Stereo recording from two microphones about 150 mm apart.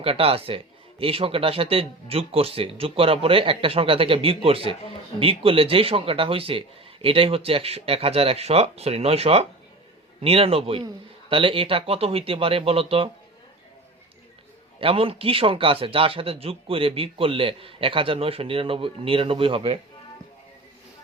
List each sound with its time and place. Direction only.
0.0 s a man's voice: 40° right (ahead or behind)
14.8 s a man's voice: 40° right (ahead or behind)